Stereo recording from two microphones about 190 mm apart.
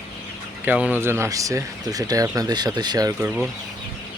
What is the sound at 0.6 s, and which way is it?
Speech, 5° right (ahead or behind).